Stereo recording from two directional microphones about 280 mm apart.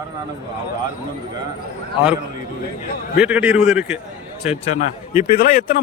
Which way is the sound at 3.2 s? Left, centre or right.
Centre.